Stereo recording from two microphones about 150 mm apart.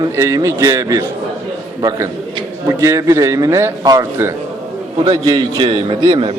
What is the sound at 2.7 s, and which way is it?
A man's voice, 20° right (ahead or behind).